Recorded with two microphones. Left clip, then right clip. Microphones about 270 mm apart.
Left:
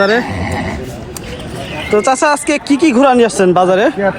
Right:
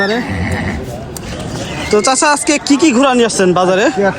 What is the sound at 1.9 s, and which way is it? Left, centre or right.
Speech, centre.